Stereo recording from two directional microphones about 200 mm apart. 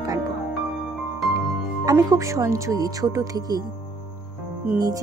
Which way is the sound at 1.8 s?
15° right (ahead or behind).